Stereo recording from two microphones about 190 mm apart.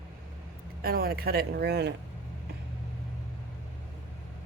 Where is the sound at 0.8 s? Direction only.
50° right (ahead or behind).